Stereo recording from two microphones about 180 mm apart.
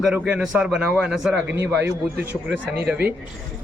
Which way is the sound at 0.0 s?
5° right (ahead or behind).